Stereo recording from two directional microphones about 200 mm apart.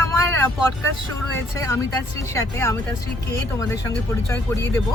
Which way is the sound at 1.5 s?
15° left (ahead or behind).